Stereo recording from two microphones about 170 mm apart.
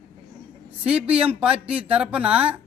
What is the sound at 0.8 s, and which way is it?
A man's voice, 5° right (ahead or behind).